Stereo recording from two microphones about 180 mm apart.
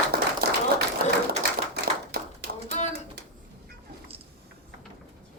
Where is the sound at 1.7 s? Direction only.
65° right (ahead or behind).